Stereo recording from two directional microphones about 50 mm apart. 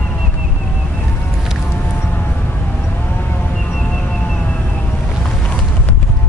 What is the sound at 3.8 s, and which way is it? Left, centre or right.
Music, left.